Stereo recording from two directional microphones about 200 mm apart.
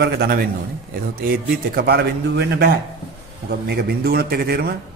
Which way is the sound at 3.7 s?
50° right (ahead or behind).